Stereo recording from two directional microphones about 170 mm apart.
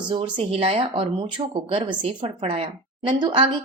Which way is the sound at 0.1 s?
30° right (ahead or behind).